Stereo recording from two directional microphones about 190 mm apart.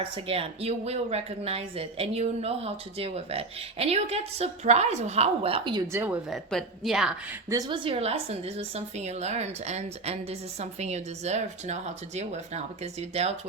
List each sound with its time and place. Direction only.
0.0 s speech: 30° right (ahead or behind)
5.9 s speech: 10° right (ahead or behind)
6.3 s a woman's voice: centre (ahead or behind)
7.5 s speech: 20° right (ahead or behind)